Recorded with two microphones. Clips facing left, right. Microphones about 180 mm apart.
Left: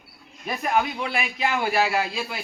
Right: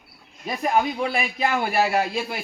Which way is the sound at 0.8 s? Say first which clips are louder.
Right 3 dB; 30° right (ahead or behind).